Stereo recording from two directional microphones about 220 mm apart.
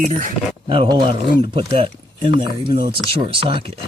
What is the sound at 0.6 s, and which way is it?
Speech, 25° right (ahead or behind).